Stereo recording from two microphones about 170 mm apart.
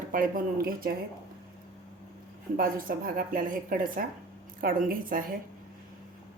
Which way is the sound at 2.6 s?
55° right (ahead or behind).